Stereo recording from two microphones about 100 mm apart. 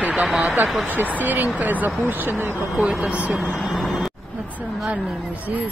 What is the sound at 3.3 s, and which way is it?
Speech, centre (ahead or behind).